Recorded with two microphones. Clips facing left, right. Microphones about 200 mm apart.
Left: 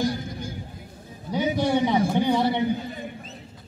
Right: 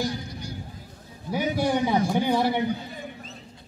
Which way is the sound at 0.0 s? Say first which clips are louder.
Left 3 dB; 50° left (ahead or behind).